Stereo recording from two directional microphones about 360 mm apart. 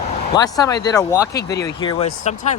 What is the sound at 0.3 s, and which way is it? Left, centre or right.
Speech, centre.